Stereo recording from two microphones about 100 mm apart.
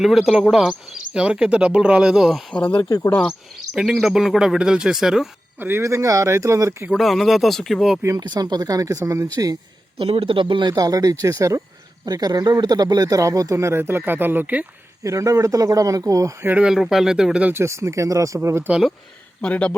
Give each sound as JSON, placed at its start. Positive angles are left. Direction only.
{"t": 0.0, "sound": "speech", "side_deg": 0}
{"t": 3.1, "sound": "speech", "side_deg": 15}
{"t": 3.5, "sound": "speech", "side_deg": 0}
{"t": 5.5, "sound": "speech", "side_deg": -20}
{"t": 6.9, "sound": "speech", "side_deg": 0}
{"t": 8.2, "sound": "speech", "side_deg": -45}
{"t": 10.0, "sound": "speech", "side_deg": -70}
{"t": 15.0, "sound": "speech", "side_deg": -30}
{"t": 16.5, "sound": "speech", "side_deg": -10}
{"t": 17.5, "sound": "speech", "side_deg": -25}
{"t": 19.4, "sound": "speech", "side_deg": 10}